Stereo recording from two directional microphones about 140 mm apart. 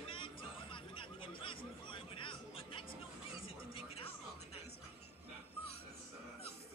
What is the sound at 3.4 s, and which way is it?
Music, 45° left (ahead or behind).